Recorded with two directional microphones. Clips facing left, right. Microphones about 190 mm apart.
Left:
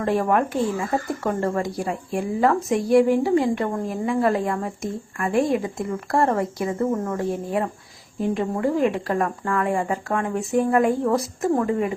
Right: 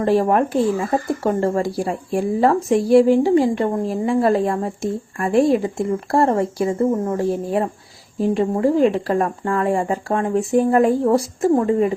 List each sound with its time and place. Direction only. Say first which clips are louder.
0.0 s a woman's voice: right 4 dB; 30° right (ahead or behind)